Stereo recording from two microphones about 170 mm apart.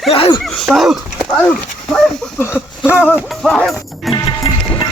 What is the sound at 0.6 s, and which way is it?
Speech, centre (ahead or behind).